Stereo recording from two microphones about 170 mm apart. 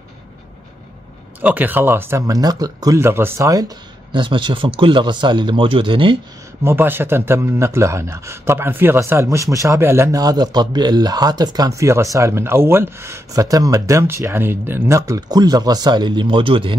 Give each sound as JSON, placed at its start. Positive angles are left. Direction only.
{"t": 1.4, "sound": "speech", "side_deg": -10}
{"t": 6.6, "sound": "speech", "side_deg": -15}